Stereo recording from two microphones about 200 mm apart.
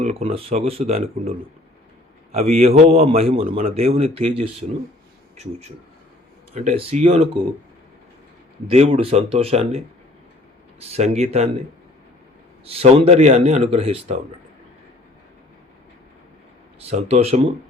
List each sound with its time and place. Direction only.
0.0 s a man's voice: 30° right (ahead or behind)
2.3 s a man's voice: 35° right (ahead or behind)
6.5 s a man's voice: 35° right (ahead or behind)
8.6 s a man's voice: 30° right (ahead or behind)
12.6 s a man's voice: 30° right (ahead or behind)
16.9 s a man's voice: 30° right (ahead or behind)